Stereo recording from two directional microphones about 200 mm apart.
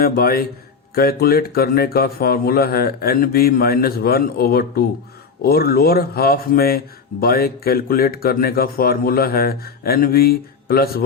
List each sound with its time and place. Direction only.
0.0 s speech: 50° left (ahead or behind)